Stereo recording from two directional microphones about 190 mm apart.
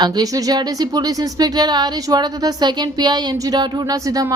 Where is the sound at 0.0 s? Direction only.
20° right (ahead or behind).